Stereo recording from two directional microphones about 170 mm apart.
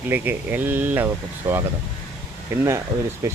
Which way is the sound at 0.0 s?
10° right (ahead or behind).